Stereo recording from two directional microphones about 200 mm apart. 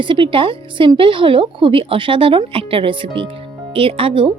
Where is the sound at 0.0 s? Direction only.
25° right (ahead or behind).